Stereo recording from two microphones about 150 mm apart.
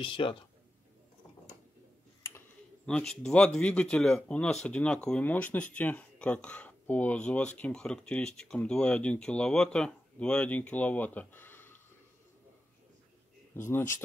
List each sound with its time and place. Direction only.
0.0 s speech: 35° left (ahead or behind)
2.9 s speech: 5° left (ahead or behind)
13.6 s speech: 20° left (ahead or behind)